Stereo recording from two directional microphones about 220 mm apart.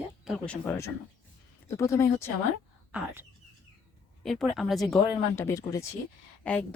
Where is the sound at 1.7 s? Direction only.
15° left (ahead or behind).